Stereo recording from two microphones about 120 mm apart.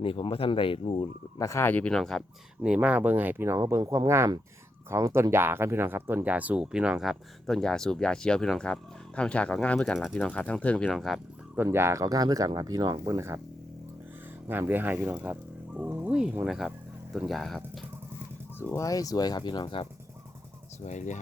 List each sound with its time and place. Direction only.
0.0 s speech: 50° left (ahead or behind)
1.4 s speech: 25° left (ahead or behind); by 2.2 s 5° left (ahead or behind)
2.6 s speech: 10° right (ahead or behind)
11.5 s speech: 20° right (ahead or behind)
14.4 s speech: 20° right (ahead or behind); by 17.6 s centre (ahead or behind)
18.6 s speech: 25° left (ahead or behind); by 19.9 s 45° left (ahead or behind)
20.8 s speech: 85° left